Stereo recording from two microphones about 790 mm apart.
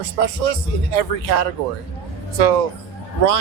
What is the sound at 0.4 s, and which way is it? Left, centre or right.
A man's voice, right.